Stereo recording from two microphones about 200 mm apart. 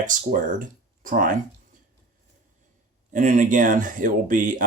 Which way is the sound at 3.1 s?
40° right (ahead or behind).